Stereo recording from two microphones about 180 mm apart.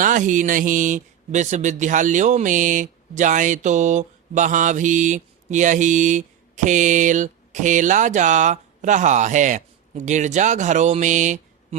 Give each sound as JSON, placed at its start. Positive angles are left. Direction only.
{"t": 0.0, "sound": "speech", "side_deg": -45}